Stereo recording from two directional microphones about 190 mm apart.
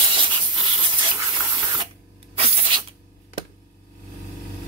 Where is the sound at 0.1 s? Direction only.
25° right (ahead or behind).